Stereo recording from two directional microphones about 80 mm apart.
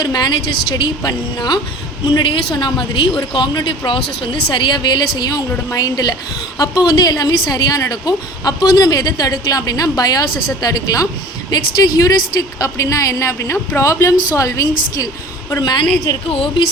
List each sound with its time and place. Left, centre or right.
0.0 s a woman's voice: left
2.1 s a woman's voice: left
15.6 s speech: left
16.1 s speech: left